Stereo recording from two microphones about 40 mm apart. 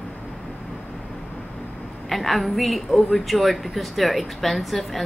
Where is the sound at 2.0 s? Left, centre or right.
Centre.